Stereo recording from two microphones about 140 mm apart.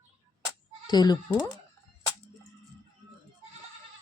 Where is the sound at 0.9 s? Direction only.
30° left (ahead or behind).